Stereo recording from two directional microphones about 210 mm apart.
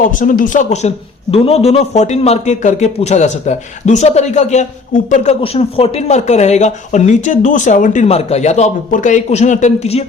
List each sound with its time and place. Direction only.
0.0 s speech: 40° left (ahead or behind)